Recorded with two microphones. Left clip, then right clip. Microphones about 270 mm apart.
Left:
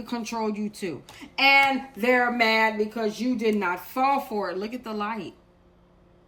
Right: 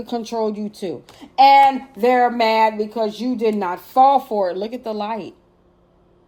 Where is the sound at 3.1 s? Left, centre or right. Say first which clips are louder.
Right 5 dB; centre.